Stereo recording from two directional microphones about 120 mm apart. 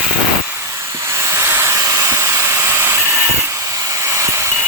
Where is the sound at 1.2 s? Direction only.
20° right (ahead or behind).